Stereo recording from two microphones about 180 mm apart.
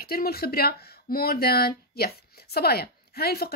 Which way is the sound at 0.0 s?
55° left (ahead or behind).